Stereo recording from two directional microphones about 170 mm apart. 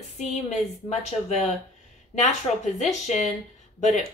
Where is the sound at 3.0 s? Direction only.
45° left (ahead or behind).